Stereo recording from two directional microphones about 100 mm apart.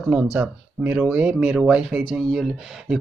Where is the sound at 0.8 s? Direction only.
15° right (ahead or behind).